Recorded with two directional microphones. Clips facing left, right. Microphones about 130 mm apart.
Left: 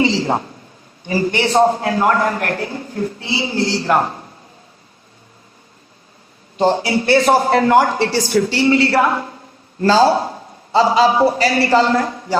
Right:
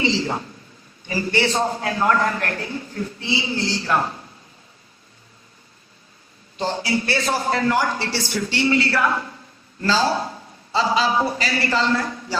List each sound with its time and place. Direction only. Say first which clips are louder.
0.0 s a sound: left 6 dB; 50° left (ahead or behind)
1.5 s speech: left 8 dB; 50° left (ahead or behind)
6.6 s a man's voice: left 7 dB; 45° left (ahead or behind)